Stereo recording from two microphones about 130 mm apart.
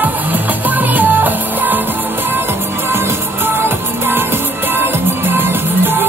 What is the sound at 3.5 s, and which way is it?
Music, 15° right (ahead or behind).